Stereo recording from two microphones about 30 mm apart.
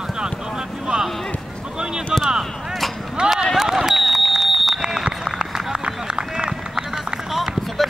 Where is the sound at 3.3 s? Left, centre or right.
Centre.